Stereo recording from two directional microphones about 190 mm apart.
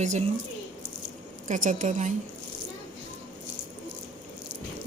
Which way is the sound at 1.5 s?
45° right (ahead or behind).